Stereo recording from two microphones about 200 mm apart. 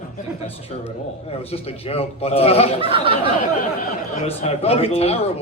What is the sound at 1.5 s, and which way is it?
Speech, 30° left (ahead or behind).